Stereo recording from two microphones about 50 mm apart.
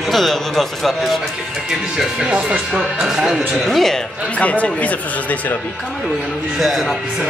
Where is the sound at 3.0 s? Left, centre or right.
Centre.